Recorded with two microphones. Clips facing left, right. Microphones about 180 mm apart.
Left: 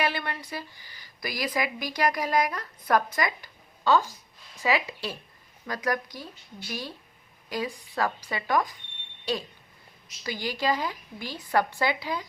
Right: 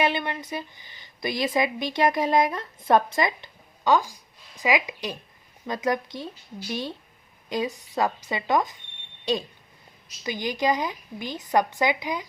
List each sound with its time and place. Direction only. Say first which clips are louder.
0.0 s speech: right 4 dB; 20° right (ahead or behind)